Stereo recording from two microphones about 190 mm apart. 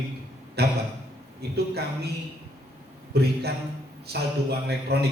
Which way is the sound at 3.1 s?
55° right (ahead or behind).